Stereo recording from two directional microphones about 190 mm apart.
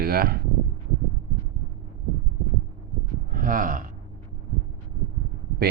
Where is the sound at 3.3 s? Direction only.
45° right (ahead or behind).